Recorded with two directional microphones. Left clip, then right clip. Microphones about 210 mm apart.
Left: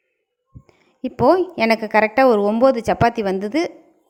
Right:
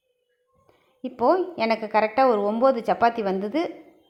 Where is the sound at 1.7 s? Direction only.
70° left (ahead or behind).